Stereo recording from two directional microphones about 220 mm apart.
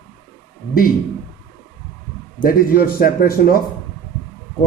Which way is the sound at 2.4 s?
40° left (ahead or behind).